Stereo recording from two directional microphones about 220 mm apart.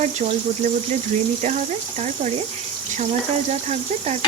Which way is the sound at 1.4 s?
35° right (ahead or behind).